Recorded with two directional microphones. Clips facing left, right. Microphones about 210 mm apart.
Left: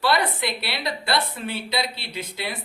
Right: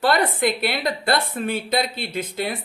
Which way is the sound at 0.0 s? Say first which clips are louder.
Right 4 dB; 50° right (ahead or behind).